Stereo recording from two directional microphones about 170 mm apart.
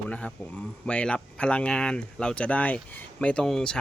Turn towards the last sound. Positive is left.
turn(degrees=5)  # may be behind; listen again after turning